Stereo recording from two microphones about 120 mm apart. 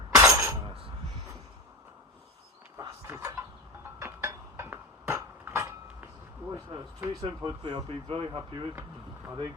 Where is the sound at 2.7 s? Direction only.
25° right (ahead or behind).